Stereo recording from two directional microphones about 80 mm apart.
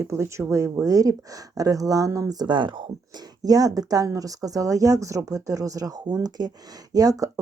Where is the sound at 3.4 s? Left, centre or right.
Right.